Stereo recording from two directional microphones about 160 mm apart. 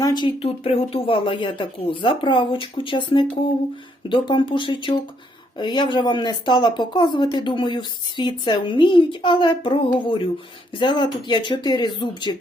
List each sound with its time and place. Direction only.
0.0 s speech: 25° left (ahead or behind)
0.4 s speech: 35° left (ahead or behind)